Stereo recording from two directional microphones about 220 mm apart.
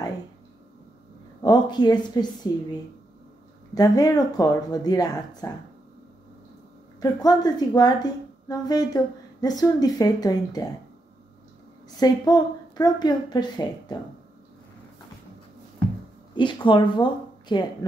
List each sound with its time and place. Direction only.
1.4 s a woman's voice: 20° left (ahead or behind)
3.7 s speech: 15° left (ahead or behind)
7.0 s speech: 20° left (ahead or behind)
12.0 s a woman's voice: 20° left (ahead or behind)
16.3 s speech: 20° left (ahead or behind)